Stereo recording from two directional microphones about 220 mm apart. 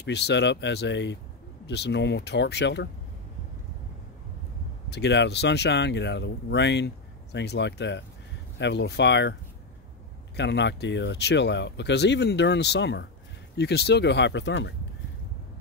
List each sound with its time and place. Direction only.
0.0 s speech: 50° left (ahead or behind)
4.8 s speech: 50° left (ahead or behind)